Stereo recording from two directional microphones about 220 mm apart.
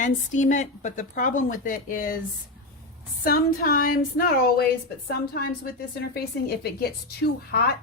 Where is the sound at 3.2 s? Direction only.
40° left (ahead or behind).